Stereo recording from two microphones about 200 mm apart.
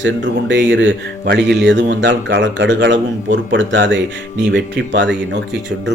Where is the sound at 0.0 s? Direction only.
65° right (ahead or behind).